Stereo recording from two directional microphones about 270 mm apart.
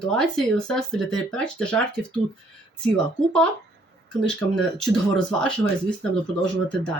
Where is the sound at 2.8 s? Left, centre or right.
Centre.